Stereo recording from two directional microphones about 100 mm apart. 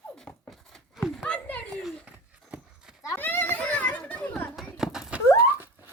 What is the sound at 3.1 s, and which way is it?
Children playing, 20° left (ahead or behind).